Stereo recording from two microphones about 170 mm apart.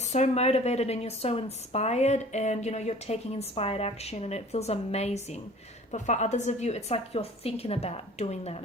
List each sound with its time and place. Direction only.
0.0 s speech: 40° left (ahead or behind)